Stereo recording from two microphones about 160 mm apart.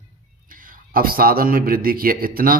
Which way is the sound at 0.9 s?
65° right (ahead or behind).